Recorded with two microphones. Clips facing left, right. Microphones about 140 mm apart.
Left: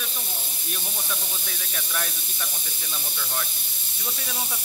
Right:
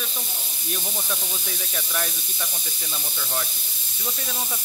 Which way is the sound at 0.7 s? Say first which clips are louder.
Right 4 dB; 5° right (ahead or behind).